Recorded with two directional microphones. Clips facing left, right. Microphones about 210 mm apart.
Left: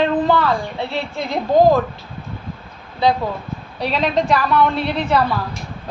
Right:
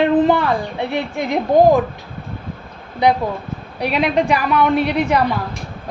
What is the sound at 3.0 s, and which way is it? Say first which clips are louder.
A woman's voice: right 2 dB; 15° right (ahead or behind).